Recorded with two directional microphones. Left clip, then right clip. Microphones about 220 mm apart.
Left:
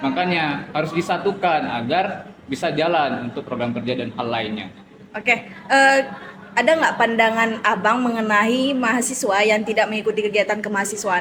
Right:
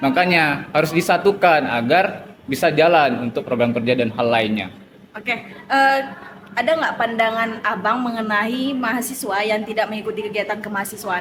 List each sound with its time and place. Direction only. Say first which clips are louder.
0.0 s a man's voice: right 5 dB; 55° right (ahead or behind)
5.1 s a woman's voice: left 5 dB; 15° left (ahead or behind)